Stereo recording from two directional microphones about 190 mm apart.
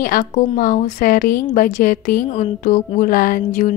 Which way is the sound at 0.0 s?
45° left (ahead or behind).